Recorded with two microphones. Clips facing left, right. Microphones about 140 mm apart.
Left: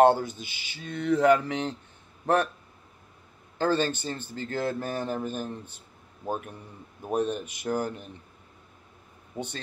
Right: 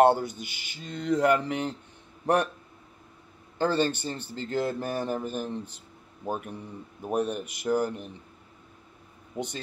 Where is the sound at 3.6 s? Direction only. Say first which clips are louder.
Even; 15° right (ahead or behind).